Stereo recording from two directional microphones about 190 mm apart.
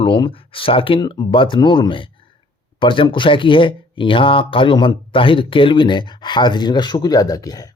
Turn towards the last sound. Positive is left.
turn(degrees=20)  # may be behind; listen again after turning